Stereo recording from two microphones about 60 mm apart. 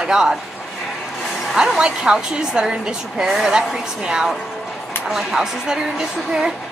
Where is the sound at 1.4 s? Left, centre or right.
Centre.